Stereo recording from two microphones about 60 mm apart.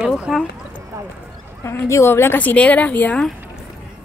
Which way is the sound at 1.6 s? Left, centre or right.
Left.